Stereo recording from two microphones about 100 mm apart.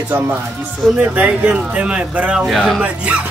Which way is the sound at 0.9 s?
15° right (ahead or behind).